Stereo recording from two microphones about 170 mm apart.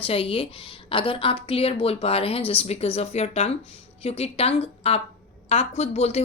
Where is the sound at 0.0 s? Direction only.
35° left (ahead or behind).